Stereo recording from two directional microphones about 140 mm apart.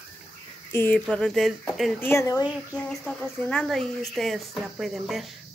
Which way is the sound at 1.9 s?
20° left (ahead or behind).